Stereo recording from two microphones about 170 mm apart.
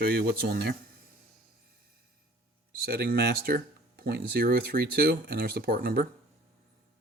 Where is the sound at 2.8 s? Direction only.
65° right (ahead or behind).